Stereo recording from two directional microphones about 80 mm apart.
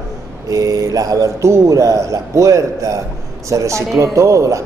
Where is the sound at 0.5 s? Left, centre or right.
Right.